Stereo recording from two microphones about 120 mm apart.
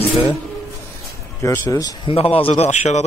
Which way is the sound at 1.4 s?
25° left (ahead or behind).